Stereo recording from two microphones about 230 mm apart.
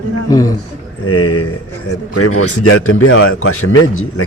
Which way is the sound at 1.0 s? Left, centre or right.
Left.